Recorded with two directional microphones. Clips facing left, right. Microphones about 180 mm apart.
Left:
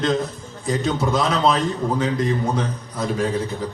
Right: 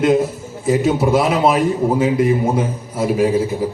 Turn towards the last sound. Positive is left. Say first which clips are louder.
# right 7 dB
turn(degrees=-10)  # may be behind; listen again after turning